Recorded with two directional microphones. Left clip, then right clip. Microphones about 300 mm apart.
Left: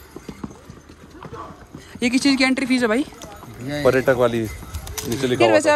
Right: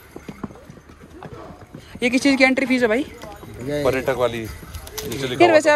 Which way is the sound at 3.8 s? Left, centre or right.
Left.